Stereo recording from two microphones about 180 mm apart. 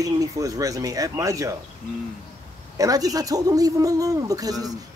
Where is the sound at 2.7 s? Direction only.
20° right (ahead or behind).